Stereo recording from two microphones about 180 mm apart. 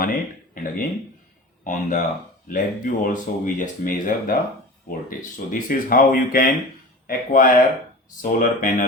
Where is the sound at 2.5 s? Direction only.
50° left (ahead or behind).